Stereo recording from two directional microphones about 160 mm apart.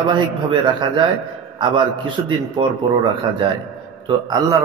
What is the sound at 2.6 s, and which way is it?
Speech, 35° right (ahead or behind).